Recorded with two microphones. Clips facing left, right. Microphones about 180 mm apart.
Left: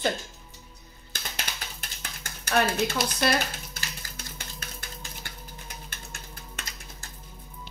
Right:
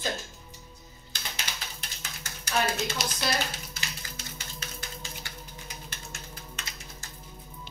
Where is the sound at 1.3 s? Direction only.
55° left (ahead or behind).